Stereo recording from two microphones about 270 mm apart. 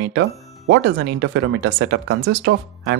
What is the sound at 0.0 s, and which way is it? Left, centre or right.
Speech, right.